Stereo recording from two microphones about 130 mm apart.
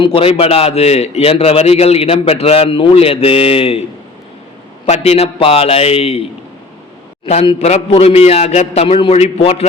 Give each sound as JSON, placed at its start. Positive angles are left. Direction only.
{"t": 0.0, "sound": "a man's voice", "side_deg": 45}
{"t": 4.9, "sound": "a man's voice", "side_deg": 55}
{"t": 7.3, "sound": "a man's voice", "side_deg": 55}